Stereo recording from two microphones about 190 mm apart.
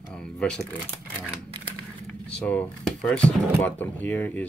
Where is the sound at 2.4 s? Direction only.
5° left (ahead or behind).